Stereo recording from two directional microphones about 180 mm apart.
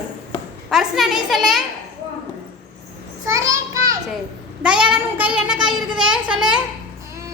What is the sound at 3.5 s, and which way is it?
Children playing, 15° right (ahead or behind).